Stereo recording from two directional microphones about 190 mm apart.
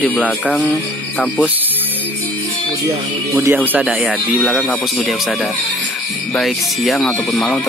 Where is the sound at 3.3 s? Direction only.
15° right (ahead or behind).